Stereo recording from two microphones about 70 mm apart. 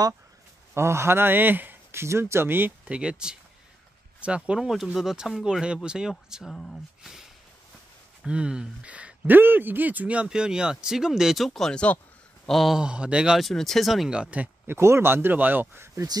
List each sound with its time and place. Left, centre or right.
0.7 s a man's voice: right
2.9 s speech: centre
6.4 s speech: centre
7.0 s speech: centre
8.3 s speech: centre
9.3 s speech: right; by 12.7 s centre
12.7 s speech: centre
13.4 s speech: centre
14.1 s speech: centre
14.7 s a man's voice: right